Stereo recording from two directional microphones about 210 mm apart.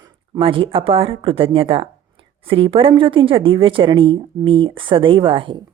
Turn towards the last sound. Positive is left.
turn(degrees=-25)  # may be behind; listen again after turning